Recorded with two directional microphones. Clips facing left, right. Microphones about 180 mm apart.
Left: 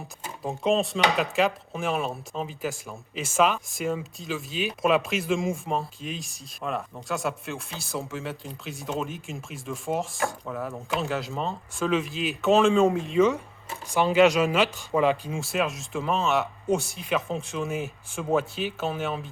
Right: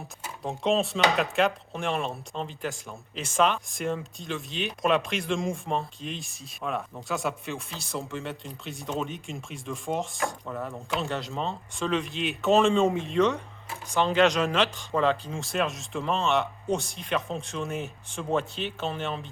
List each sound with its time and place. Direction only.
0.4 s speech: centre (ahead or behind)